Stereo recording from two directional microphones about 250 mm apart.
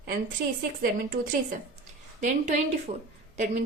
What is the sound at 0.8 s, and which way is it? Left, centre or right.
A woman's voice, right.